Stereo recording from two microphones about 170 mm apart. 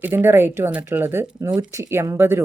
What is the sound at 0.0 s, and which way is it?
Speech, 10° right (ahead or behind).